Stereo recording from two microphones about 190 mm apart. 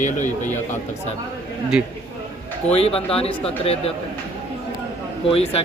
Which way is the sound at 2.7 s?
30° left (ahead or behind).